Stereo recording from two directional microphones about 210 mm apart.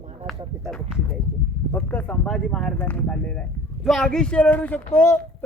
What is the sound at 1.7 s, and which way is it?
Speech, 10° left (ahead or behind).